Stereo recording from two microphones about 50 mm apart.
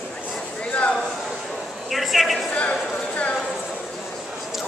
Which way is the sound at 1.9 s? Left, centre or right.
Centre.